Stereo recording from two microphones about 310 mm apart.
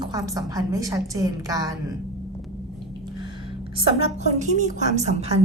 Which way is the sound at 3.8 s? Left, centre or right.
Centre.